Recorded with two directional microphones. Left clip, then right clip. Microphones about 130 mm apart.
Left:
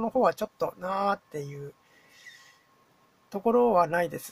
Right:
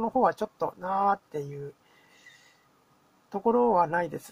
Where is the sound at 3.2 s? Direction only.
15° left (ahead or behind).